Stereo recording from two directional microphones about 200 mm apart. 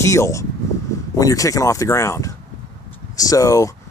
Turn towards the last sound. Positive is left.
turn(degrees=15)  # may be behind; listen again after turning